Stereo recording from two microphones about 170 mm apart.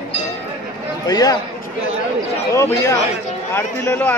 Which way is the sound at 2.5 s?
15° left (ahead or behind).